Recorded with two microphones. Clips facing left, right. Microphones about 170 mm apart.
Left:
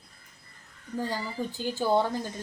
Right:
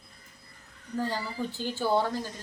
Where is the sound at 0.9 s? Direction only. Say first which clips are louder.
Even; 15° left (ahead or behind).